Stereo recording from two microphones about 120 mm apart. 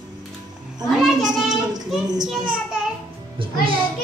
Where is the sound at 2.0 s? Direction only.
35° right (ahead or behind).